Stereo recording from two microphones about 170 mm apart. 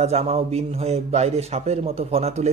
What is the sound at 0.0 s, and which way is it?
A man's voice, 40° right (ahead or behind).